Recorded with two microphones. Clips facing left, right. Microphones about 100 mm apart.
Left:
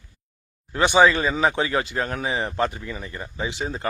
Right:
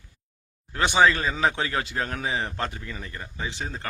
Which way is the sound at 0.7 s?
5° left (ahead or behind).